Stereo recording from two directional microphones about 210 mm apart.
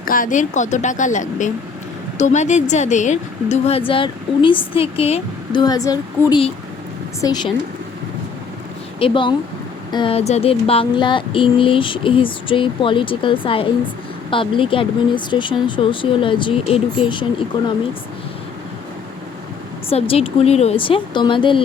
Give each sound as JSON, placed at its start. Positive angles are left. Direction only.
{"t": 0.0, "sound": "a woman's voice", "side_deg": 40}
{"t": 9.0, "sound": "speech", "side_deg": 25}
{"t": 19.9, "sound": "speech", "side_deg": 30}